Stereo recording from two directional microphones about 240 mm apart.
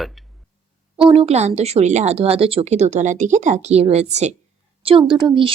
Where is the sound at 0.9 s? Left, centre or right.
Right.